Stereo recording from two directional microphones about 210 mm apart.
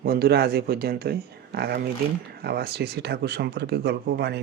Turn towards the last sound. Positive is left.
turn(degrees=-55)  # may be behind; listen again after turning